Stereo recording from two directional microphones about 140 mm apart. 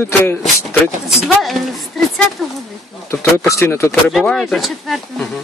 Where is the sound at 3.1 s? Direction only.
20° left (ahead or behind).